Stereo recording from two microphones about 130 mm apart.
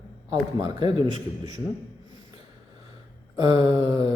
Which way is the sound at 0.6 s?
35° right (ahead or behind).